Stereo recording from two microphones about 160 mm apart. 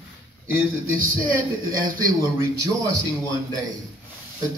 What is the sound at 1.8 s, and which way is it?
Speech, 60° right (ahead or behind).